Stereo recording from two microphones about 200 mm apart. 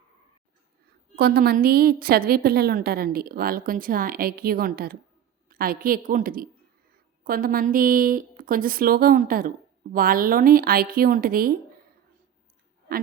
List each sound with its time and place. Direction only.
1.1 s a woman's voice: 50° right (ahead or behind)